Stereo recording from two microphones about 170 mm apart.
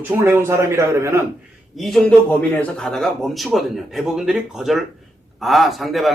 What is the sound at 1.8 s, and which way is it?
A man's voice, centre (ahead or behind).